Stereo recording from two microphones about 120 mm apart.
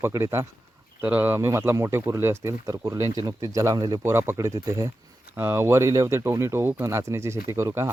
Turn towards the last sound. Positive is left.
turn(degrees=-25)  # may be behind; listen again after turning